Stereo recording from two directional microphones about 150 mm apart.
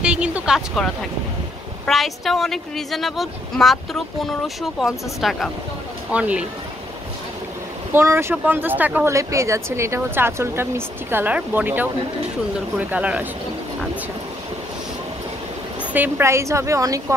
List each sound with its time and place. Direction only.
0.0 s a sound: 5° right (ahead or behind)
0.8 s speech: centre (ahead or behind)
7.9 s speech: 20° right (ahead or behind)
15.9 s a woman's voice: 15° right (ahead or behind)